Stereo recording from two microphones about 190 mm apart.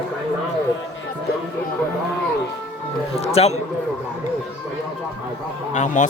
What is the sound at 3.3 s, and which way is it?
Speech, 35° left (ahead or behind).